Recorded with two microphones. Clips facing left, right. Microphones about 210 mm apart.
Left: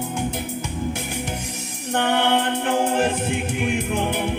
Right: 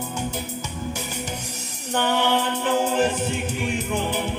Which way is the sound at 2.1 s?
60° left (ahead or behind).